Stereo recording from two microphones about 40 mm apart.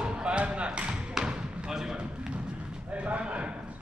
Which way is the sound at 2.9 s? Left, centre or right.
Right.